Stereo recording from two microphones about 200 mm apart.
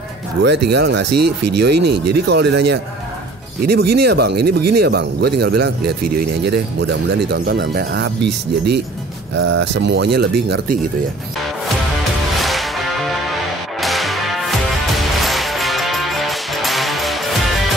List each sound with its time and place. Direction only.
0.4 s speech: 55° right (ahead or behind)
12.4 s music: centre (ahead or behind)